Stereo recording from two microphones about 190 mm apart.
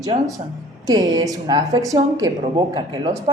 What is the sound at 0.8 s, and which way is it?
A woman's voice, 20° right (ahead or behind).